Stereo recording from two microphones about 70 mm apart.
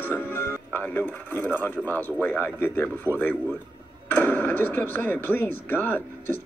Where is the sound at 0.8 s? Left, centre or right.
Left.